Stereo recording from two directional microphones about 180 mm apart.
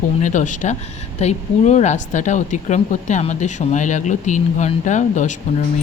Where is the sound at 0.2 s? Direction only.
45° left (ahead or behind).